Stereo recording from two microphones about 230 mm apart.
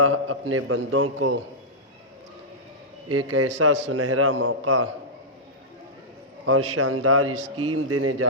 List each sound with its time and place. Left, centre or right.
0.0 s a man's voice: right
3.1 s a man's voice: right
3.5 s a man's voice: right
3.9 s a man's voice: right
6.4 s a man's voice: right